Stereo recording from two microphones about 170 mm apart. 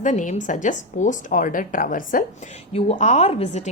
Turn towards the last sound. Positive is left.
turn(degrees=40)  # may be behind; listen again after turning